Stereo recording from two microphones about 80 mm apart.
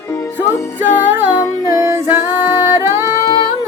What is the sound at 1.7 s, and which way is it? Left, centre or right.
Music, right.